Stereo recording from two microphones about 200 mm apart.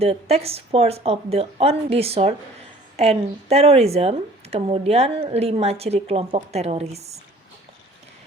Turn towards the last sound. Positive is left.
turn(degrees=-30)  # may be behind; listen again after turning